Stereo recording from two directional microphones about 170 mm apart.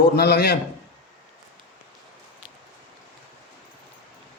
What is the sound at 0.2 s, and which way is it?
Speech, 70° left (ahead or behind).